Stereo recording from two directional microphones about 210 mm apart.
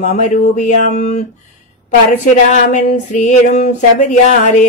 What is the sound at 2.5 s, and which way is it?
Mantra, 35° left (ahead or behind).